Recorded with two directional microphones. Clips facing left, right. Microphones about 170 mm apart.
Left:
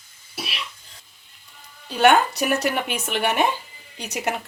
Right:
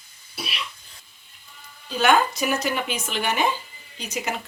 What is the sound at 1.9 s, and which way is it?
A woman's voice, 65° left (ahead or behind).